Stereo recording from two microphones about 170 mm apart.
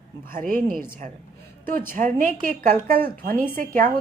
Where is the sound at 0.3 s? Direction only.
55° right (ahead or behind).